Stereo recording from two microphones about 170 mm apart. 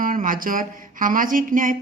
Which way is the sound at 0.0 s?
55° right (ahead or behind).